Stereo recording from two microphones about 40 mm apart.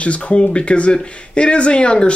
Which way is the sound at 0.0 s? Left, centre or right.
Left.